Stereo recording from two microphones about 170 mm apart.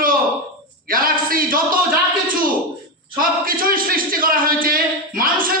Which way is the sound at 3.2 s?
55° right (ahead or behind).